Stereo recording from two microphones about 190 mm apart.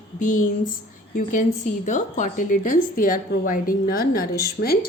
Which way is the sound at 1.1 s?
45° left (ahead or behind).